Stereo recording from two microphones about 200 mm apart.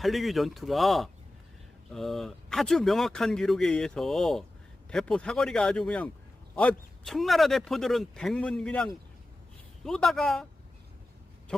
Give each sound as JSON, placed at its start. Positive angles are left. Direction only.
{"t": 0.0, "sound": "speech", "side_deg": 0}